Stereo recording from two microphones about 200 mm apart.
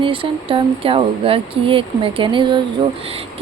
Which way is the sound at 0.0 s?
25° right (ahead or behind).